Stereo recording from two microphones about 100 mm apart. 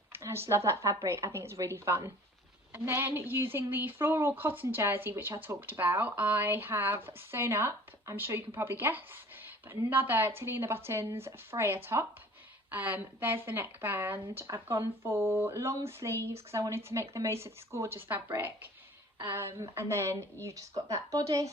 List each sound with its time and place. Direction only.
0.1 s a woman's voice: 25° right (ahead or behind)
12.7 s a woman's voice: 15° right (ahead or behind); by 21.5 s 35° right (ahead or behind)